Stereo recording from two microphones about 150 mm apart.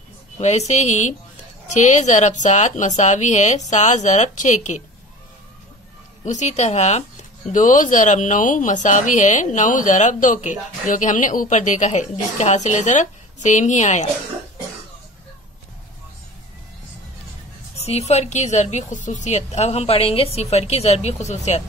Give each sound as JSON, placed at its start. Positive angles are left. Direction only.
{"t": 0.4, "sound": "a woman's voice", "side_deg": 50}
{"t": 6.2, "sound": "a woman's voice", "side_deg": 50}
{"t": 7.5, "sound": "speech", "side_deg": 60}
{"t": 17.8, "sound": "a woman's voice", "side_deg": 45}